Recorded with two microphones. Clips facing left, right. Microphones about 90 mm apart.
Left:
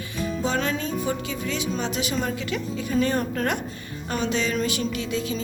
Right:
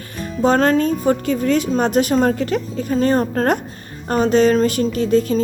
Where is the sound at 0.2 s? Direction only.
50° right (ahead or behind).